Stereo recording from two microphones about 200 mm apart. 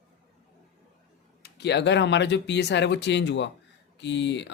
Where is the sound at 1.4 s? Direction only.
55° left (ahead or behind).